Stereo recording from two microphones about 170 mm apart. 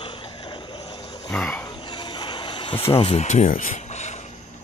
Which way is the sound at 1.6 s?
25° left (ahead or behind).